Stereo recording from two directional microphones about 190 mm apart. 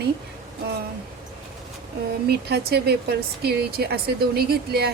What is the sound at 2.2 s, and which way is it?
Speech, 60° right (ahead or behind).